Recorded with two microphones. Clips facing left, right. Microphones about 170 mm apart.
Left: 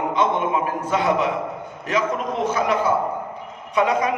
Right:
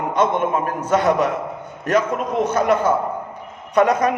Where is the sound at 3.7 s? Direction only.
45° right (ahead or behind).